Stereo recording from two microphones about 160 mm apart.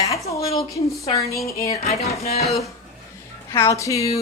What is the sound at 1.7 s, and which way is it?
Speech, 40° left (ahead or behind).